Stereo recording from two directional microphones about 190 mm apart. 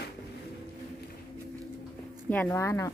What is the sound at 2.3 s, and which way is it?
Speech, 10° left (ahead or behind).